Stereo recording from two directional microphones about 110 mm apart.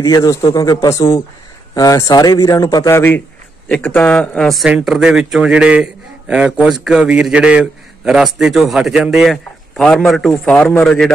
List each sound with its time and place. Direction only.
0.0 s a man's voice: 30° left (ahead or behind)
2.9 s a man's voice: 20° left (ahead or behind)